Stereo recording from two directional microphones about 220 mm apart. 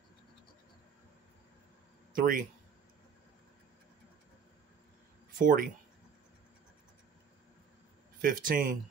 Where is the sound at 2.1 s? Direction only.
40° right (ahead or behind).